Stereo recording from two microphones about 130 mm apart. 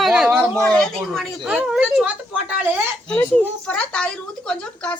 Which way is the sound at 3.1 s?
10° left (ahead or behind).